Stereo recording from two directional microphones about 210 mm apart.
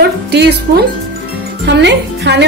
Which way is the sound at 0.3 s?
50° right (ahead or behind).